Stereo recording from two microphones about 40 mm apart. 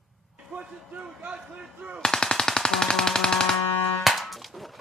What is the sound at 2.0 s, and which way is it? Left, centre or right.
Machine gun, centre.